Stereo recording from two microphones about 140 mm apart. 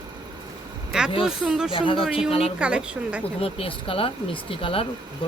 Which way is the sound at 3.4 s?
40° left (ahead or behind).